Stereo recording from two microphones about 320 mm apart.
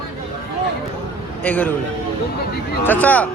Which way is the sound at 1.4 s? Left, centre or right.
Centre.